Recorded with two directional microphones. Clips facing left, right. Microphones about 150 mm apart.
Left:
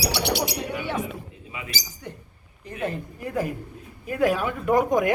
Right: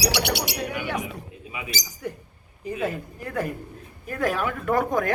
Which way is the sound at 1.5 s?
15° right (ahead or behind).